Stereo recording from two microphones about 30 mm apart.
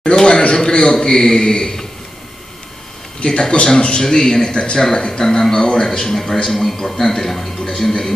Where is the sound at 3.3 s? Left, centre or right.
Left.